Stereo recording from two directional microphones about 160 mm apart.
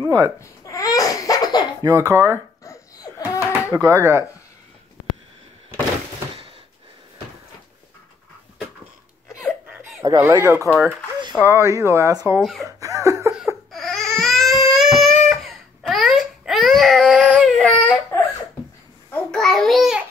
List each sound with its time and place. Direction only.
0.4 s laughter: 20° left (ahead or behind)
1.8 s speech: 20° right (ahead or behind)
2.6 s a sound: 20° left (ahead or behind)
3.8 s speech: 15° right (ahead or behind)
9.4 s a sound: 5° right (ahead or behind)
10.0 s speech: 15° right (ahead or behind)
12.4 s speech: centre (ahead or behind)
12.6 s chuckle: 20° right (ahead or behind)
13.7 s crying: centre (ahead or behind)
17.6 s baby cry: 10° left (ahead or behind)
19.0 s babbling: 10° left (ahead or behind)